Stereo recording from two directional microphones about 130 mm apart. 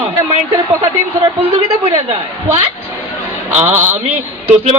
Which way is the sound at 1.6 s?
45° right (ahead or behind).